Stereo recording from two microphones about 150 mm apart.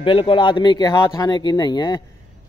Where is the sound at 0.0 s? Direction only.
35° left (ahead or behind).